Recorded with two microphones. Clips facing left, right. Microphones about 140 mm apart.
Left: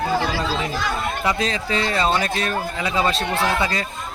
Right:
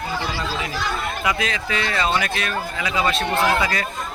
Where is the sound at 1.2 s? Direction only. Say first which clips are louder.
Left 1 dB; 30° left (ahead or behind).